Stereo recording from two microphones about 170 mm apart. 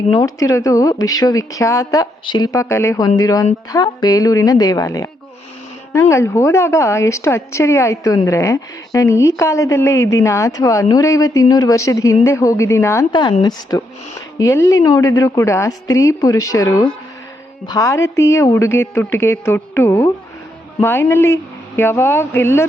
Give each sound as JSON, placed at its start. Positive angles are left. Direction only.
{"t": 0.3, "sound": "a woman's voice", "side_deg": 20}
{"t": 13.1, "sound": "a woman's voice", "side_deg": 25}